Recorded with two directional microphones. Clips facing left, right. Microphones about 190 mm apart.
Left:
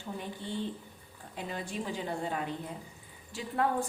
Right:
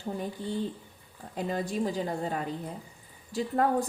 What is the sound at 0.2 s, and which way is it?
A woman's voice, 40° right (ahead or behind).